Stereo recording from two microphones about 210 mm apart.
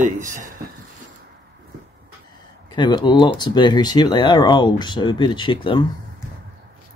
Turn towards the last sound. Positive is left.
turn(degrees=20)  # may be behind; listen again after turning